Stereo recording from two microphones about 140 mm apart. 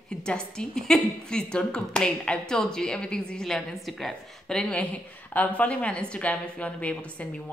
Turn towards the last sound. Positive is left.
turn(degrees=10)  # may be behind; listen again after turning